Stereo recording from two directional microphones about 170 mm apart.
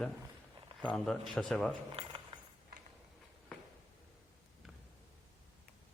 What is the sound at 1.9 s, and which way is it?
Keys jangling, 30° right (ahead or behind).